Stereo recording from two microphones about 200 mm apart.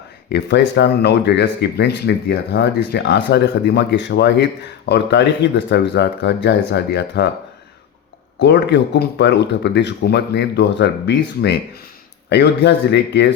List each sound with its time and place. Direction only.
0.3 s speech: 60° left (ahead or behind)
8.4 s speech: 60° left (ahead or behind)